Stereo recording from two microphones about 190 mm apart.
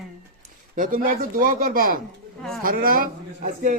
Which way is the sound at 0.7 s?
45° right (ahead or behind).